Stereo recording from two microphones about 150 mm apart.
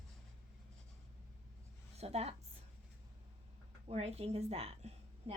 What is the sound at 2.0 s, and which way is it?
Speech, 45° right (ahead or behind).